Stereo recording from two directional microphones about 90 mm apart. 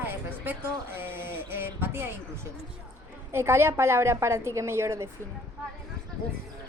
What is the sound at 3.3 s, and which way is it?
A woman's voice, 30° right (ahead or behind).